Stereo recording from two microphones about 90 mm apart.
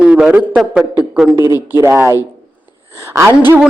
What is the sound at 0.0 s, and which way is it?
Speech, 10° right (ahead or behind).